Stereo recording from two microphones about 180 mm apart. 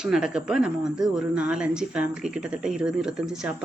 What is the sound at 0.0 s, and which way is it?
Speech, 5° right (ahead or behind).